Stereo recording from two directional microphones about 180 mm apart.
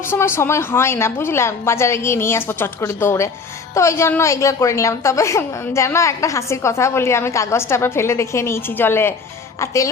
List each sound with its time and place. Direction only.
0.0 s a woman's voice: 15° left (ahead or behind)